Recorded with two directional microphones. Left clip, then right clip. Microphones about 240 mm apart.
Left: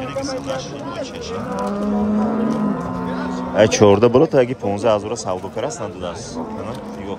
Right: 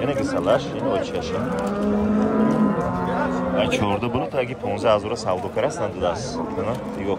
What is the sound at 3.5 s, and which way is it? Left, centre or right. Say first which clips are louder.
A man's voice: left 12 dB; left.